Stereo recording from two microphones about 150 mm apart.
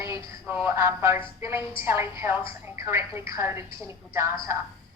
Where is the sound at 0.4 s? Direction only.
10° right (ahead or behind).